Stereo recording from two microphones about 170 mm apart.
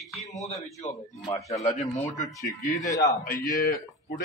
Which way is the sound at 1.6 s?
40° left (ahead or behind).